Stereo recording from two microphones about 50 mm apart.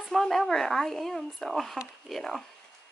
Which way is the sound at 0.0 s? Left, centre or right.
Centre.